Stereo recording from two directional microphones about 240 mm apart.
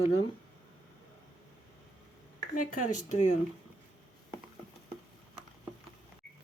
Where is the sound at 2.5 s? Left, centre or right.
Left.